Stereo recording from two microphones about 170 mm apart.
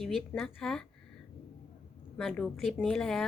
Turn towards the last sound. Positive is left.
turn(degrees=0)  # may be behind; listen again after turning